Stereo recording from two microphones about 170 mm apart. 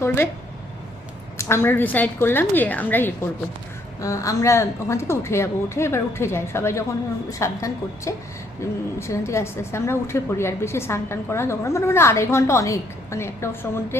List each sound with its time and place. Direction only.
0.0 s speech: 15° left (ahead or behind)
1.4 s a woman's voice: 15° left (ahead or behind)